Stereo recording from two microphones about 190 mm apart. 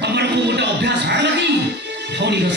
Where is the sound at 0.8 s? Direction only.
65° right (ahead or behind).